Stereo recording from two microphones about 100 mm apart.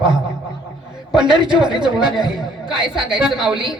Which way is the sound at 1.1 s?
5° right (ahead or behind).